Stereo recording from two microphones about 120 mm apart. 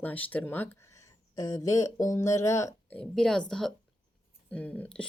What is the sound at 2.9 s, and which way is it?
Speech, 5° left (ahead or behind).